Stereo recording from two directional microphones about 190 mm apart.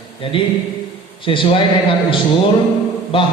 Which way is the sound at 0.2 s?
30° left (ahead or behind).